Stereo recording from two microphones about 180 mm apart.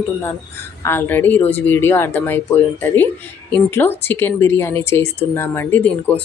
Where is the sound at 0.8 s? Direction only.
10° left (ahead or behind).